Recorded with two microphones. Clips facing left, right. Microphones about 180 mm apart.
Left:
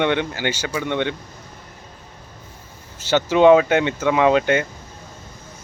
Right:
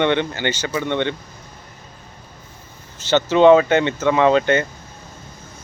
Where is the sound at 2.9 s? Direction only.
10° left (ahead or behind).